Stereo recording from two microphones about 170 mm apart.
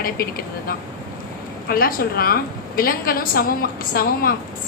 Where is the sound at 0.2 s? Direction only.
60° left (ahead or behind).